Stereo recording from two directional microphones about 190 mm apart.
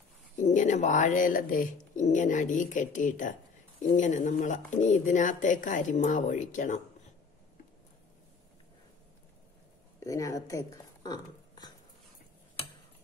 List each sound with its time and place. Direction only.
0.4 s speech: 40° left (ahead or behind)
10.0 s speech: 15° left (ahead or behind)